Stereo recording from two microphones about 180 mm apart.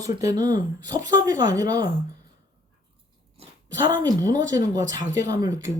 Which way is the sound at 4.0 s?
20° right (ahead or behind).